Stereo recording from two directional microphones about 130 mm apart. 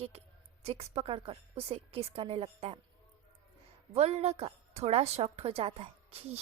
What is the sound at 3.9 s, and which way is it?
A woman's voice, 55° right (ahead or behind).